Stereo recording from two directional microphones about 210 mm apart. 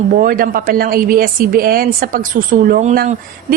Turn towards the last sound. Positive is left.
turn(degrees=-40)  # may be behind; listen again after turning